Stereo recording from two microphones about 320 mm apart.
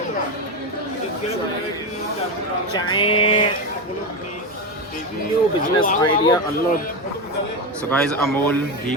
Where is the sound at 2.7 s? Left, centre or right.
Centre.